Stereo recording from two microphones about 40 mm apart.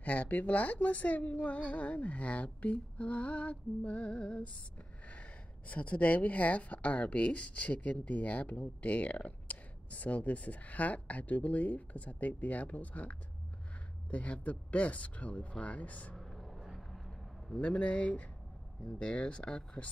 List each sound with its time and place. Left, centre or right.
0.0 s speech: left
16.5 s vehicle: centre
17.6 s speech: left